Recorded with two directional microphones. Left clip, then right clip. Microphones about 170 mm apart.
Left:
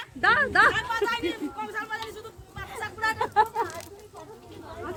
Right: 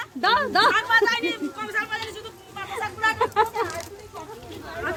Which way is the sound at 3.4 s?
80° left.